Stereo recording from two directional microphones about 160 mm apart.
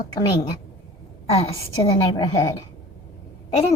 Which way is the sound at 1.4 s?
35° left (ahead or behind).